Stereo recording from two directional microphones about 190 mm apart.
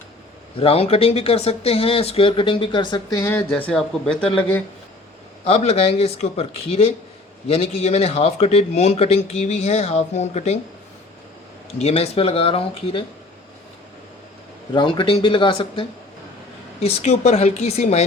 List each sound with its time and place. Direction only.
0.5 s speech: 30° left (ahead or behind); by 4.6 s 5° left (ahead or behind)
5.5 s speech: 35° left (ahead or behind)
11.8 s speech: 35° left (ahead or behind)
14.7 s speech: 25° left (ahead or behind)